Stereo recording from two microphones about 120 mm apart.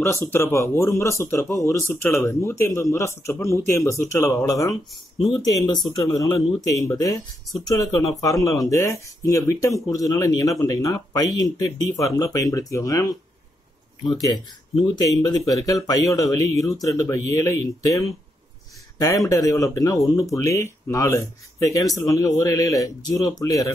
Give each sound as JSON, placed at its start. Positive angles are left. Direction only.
{"t": 0.0, "sound": "speech", "side_deg": 20}
{"t": 15.1, "sound": "speech", "side_deg": 35}